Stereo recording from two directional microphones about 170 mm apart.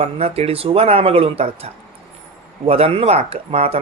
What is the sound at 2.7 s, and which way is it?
Speech, 35° right (ahead or behind).